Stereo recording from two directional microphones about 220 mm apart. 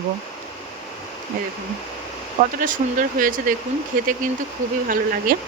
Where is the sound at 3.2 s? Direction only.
40° right (ahead or behind).